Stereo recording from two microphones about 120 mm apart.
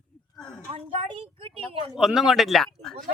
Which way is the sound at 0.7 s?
50° right (ahead or behind).